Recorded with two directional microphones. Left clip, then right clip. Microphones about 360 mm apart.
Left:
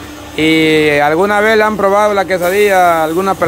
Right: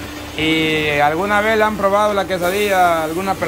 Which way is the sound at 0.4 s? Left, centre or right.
Centre.